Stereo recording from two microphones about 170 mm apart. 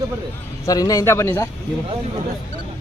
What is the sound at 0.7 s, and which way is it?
Speech, 20° left (ahead or behind).